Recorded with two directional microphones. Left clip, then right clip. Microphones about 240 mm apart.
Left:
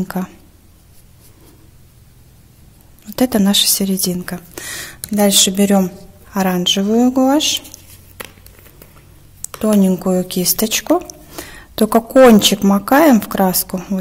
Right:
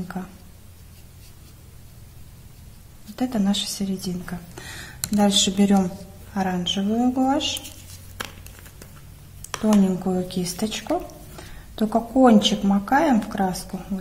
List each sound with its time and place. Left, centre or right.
3.2 s a woman's voice: left
9.8 s a woman's voice: left